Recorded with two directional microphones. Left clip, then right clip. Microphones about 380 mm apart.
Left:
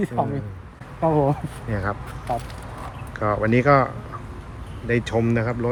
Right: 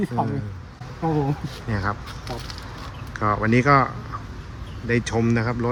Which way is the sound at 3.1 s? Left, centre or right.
Centre.